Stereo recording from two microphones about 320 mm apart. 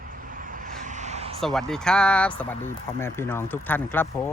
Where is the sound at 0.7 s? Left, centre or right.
Right.